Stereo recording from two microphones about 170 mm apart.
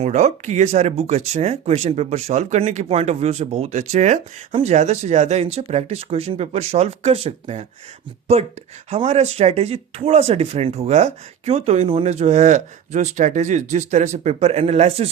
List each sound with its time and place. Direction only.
0.0 s speech: 45° right (ahead or behind)